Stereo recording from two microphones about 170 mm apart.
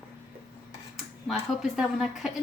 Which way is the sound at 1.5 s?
Centre (ahead or behind).